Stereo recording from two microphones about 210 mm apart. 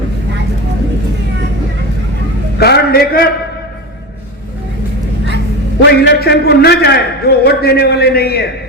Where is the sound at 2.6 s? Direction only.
50° left (ahead or behind).